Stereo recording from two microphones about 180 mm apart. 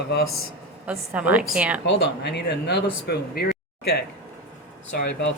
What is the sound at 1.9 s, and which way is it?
Speech, 70° left (ahead or behind).